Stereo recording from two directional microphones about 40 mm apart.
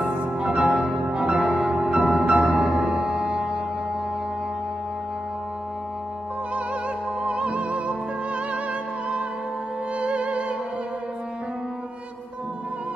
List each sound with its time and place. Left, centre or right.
0.4 s music: centre
7.2 s music: right
9.9 s music: right